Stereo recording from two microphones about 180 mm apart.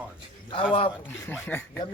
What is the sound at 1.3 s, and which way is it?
Speech, 10° left (ahead or behind).